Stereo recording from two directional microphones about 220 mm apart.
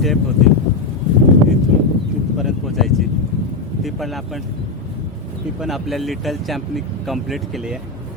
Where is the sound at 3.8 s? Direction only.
Centre (ahead or behind).